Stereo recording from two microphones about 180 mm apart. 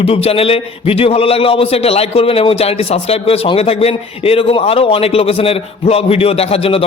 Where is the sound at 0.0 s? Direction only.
35° left (ahead or behind).